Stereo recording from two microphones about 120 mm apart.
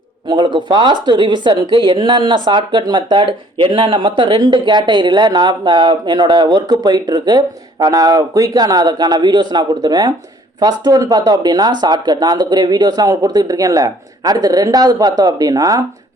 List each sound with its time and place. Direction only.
0.3 s speech: 40° right (ahead or behind)